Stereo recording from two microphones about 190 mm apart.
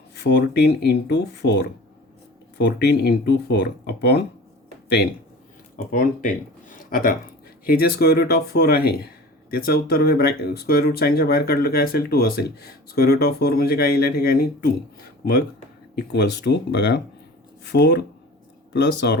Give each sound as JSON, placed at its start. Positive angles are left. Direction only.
{"t": 0.2, "sound": "speech", "side_deg": 65}
{"t": 5.7, "sound": "speech", "side_deg": 45}
{"t": 16.0, "sound": "speech", "side_deg": 60}